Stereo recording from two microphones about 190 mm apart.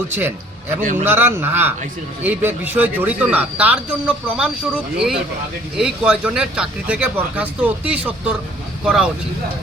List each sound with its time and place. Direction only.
0.8 s a man's voice: 45° right (ahead or behind)
1.0 s speech: 10° right (ahead or behind)